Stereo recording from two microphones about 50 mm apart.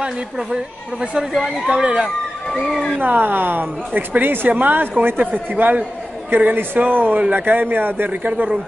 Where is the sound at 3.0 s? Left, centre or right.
Right.